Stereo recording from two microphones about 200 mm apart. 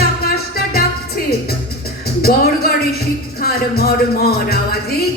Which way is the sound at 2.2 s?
50° left (ahead or behind).